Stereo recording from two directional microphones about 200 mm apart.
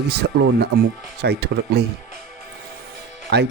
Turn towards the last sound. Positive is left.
turn(degrees=-60)  # may be behind; listen again after turning